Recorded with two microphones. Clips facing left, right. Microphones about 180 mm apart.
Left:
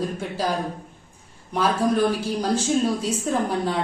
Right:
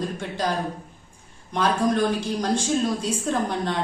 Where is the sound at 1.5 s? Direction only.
5° left (ahead or behind).